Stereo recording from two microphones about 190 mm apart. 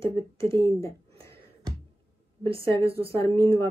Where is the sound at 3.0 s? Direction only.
15° left (ahead or behind).